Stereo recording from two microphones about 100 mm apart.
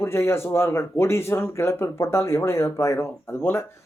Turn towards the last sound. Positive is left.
turn(degrees=25)  # may be behind; listen again after turning